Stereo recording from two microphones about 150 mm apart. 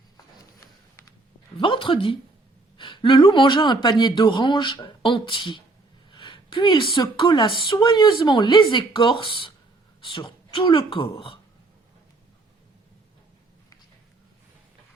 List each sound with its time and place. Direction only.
1.5 s speech: 35° left (ahead or behind)